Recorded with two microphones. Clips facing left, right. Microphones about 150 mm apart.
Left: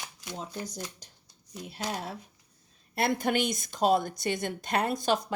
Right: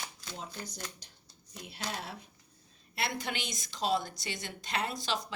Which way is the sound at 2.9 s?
50° left (ahead or behind).